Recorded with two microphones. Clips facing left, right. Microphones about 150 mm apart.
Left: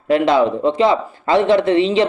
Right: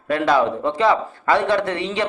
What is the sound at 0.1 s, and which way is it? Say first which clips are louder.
A man's voice: left 4 dB; 20° left (ahead or behind).